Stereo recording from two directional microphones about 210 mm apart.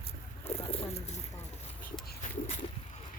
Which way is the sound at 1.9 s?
35° left (ahead or behind).